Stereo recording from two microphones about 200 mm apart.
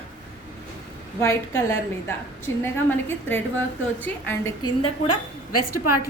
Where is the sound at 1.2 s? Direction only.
15° left (ahead or behind).